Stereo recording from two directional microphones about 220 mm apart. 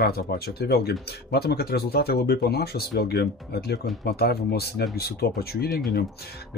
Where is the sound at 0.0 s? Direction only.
45° left (ahead or behind).